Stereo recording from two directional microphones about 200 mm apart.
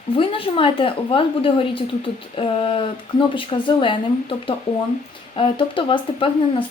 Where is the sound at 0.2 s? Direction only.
25° left (ahead or behind).